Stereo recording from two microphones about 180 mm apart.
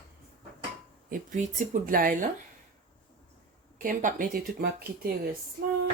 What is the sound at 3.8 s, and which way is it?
Speech, 50° right (ahead or behind).